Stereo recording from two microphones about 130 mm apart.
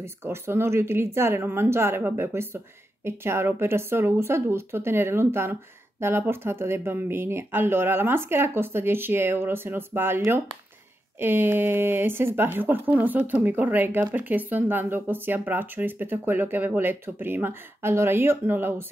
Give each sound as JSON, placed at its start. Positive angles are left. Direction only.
{"t": 0.0, "sound": "speech", "side_deg": -20}